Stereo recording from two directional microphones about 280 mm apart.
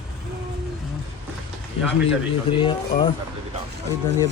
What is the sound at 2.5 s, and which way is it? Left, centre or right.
Speech, centre.